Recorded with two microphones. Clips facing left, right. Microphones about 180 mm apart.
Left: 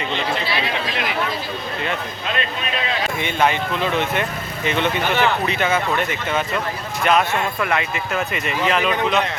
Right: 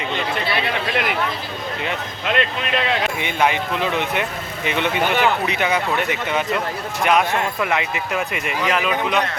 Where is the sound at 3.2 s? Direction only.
15° right (ahead or behind).